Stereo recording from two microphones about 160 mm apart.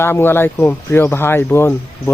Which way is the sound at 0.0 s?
15° left (ahead or behind).